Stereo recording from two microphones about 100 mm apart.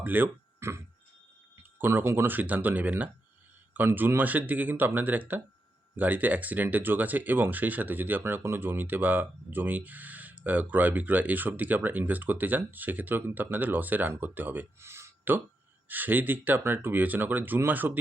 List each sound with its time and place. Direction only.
0.0 s speech: 20° right (ahead or behind)